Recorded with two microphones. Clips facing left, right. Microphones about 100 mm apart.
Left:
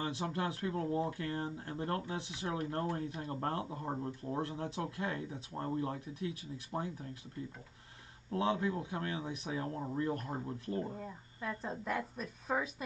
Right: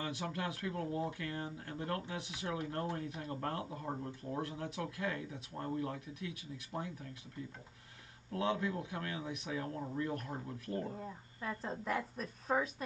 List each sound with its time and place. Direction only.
0.0 s speech: 30° left (ahead or behind)
8.3 s speech: 30° left (ahead or behind)
10.4 s speech: 20° left (ahead or behind)
10.9 s a woman's voice: centre (ahead or behind)